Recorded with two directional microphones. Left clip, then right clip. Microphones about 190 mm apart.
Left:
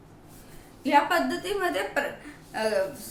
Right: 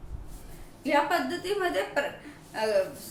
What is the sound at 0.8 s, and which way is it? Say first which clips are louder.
A woman's voice: left 3 dB; 10° left (ahead or behind).